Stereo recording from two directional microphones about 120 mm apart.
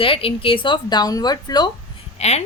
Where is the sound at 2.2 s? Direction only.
65° left (ahead or behind).